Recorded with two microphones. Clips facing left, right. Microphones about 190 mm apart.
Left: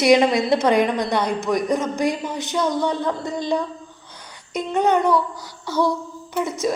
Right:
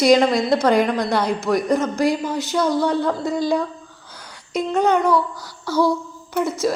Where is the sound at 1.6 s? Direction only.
15° left (ahead or behind).